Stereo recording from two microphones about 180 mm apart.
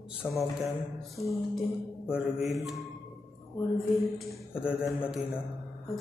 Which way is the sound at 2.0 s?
5° right (ahead or behind).